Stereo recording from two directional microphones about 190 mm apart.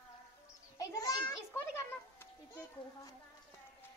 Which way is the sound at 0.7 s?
20° left (ahead or behind).